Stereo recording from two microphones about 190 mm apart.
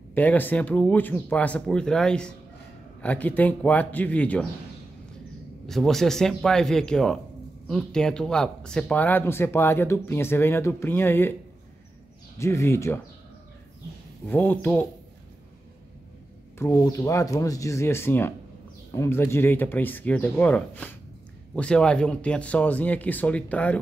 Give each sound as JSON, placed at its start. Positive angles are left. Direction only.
{"t": 0.1, "sound": "speech", "side_deg": 10}
{"t": 5.7, "sound": "speech", "side_deg": 0}
{"t": 12.4, "sound": "speech", "side_deg": 15}
{"t": 14.2, "sound": "speech", "side_deg": 10}
{"t": 16.5, "sound": "speech", "side_deg": 15}